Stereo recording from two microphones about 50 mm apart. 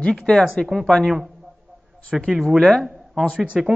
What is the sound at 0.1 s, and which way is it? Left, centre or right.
Speech, centre.